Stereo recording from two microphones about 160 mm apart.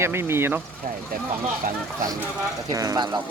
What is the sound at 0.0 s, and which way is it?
Speech, 15° right (ahead or behind).